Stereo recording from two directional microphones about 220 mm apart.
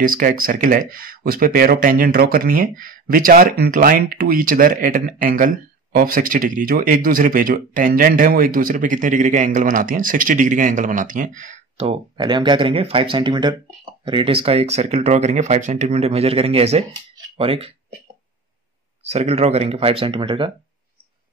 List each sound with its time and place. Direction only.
0.0 s speech: 40° right (ahead or behind)
19.0 s speech: 30° right (ahead or behind)